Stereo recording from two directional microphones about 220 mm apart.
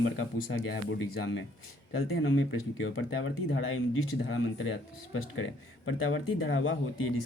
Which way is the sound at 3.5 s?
65° left (ahead or behind).